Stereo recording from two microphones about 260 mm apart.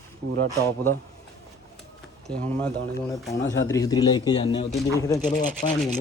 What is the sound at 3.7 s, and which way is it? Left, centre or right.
A man's voice, centre.